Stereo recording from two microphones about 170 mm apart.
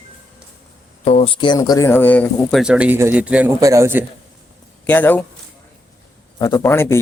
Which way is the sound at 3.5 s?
20° right (ahead or behind).